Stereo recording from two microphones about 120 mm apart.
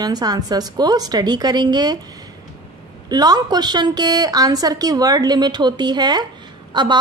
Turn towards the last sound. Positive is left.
turn(degrees=-40)  # may be behind; listen again after turning